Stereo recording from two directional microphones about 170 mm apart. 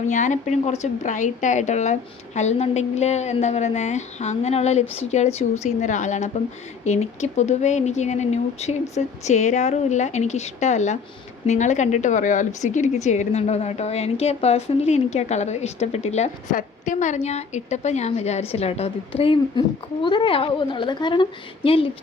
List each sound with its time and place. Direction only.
0.0 s a woman's voice: 45° left (ahead or behind)